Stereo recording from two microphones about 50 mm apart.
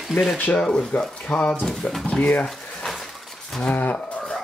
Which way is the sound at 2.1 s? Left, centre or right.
Left.